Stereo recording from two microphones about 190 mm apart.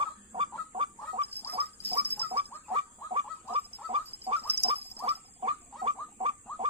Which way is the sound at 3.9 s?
30° right (ahead or behind).